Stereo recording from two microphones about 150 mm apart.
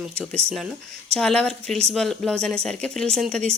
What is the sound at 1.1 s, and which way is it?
A woman's voice, 5° left (ahead or behind).